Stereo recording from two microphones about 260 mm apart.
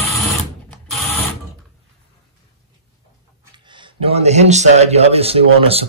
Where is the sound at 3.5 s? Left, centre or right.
Centre.